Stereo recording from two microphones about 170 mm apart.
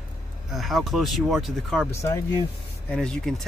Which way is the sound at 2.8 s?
5° left (ahead or behind).